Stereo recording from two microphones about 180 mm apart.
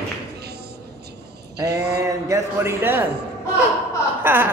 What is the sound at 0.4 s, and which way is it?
Music, 65° right (ahead or behind).